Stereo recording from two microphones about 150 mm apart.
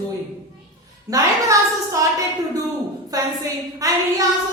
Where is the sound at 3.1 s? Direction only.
25° right (ahead or behind).